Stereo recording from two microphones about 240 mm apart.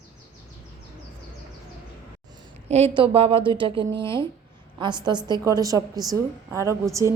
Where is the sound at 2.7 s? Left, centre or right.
Right.